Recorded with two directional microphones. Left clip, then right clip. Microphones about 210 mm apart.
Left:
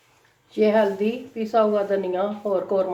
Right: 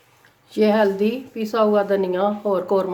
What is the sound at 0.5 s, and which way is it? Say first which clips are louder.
A woman's voice: right 2 dB; 45° right (ahead or behind).